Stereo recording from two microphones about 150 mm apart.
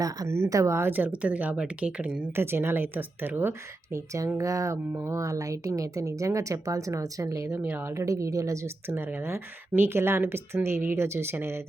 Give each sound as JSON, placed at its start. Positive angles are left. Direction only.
{"t": 0.0, "sound": "speech", "side_deg": -20}